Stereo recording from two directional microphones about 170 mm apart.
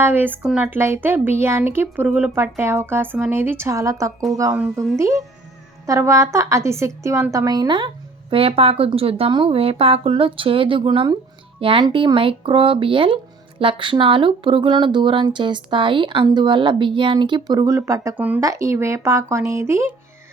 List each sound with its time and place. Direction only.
0.0 s speech: 10° right (ahead or behind)